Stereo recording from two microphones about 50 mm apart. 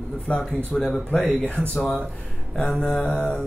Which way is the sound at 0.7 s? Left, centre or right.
Left.